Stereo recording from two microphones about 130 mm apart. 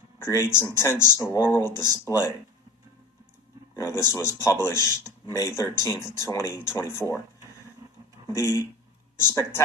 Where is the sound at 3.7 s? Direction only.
20° left (ahead or behind).